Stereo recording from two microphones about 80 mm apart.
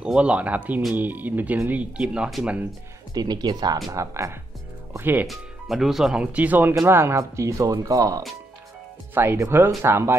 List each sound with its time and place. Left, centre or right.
0.0 s speech: centre
3.2 s speech: right
3.9 s speech: right
4.9 s speech: right
5.2 s speech: centre
6.3 s speech: right
6.9 s speech: right
9.1 s speech: right